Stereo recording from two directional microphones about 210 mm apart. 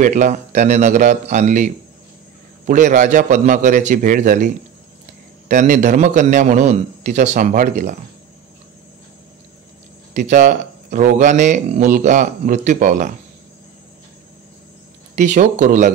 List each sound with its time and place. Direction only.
0.0 s speech: 35° right (ahead or behind)
5.5 s speech: 35° right (ahead or behind)
10.1 s speech: 35° right (ahead or behind)
15.1 s speech: 35° right (ahead or behind)